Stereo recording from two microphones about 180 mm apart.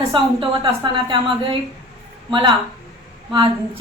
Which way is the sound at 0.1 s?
30° right (ahead or behind).